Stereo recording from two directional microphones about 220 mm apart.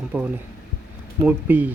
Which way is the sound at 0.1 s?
5° right (ahead or behind).